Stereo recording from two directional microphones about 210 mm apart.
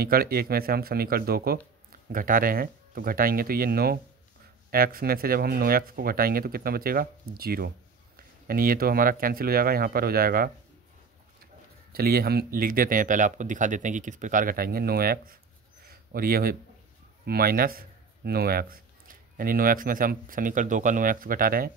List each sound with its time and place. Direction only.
0.0 s speech: 45° right (ahead or behind)
11.9 s speech: 45° right (ahead or behind)